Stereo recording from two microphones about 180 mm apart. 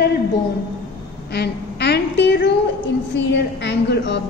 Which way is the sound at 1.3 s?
65° left (ahead or behind).